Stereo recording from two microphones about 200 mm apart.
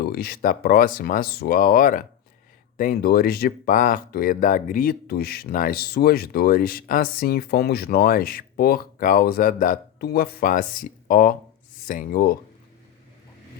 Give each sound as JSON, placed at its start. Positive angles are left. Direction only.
{"t": 0.0, "sound": "speech", "side_deg": 50}